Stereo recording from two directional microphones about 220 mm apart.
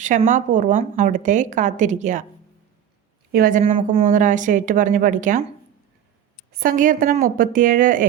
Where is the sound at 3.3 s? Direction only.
40° right (ahead or behind).